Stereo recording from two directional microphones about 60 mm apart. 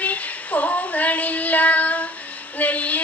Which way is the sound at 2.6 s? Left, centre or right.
Left.